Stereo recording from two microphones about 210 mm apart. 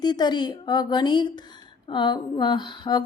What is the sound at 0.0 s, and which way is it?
A woman's voice, 20° left (ahead or behind).